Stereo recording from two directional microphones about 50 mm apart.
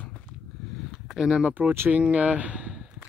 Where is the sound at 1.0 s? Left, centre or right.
Centre.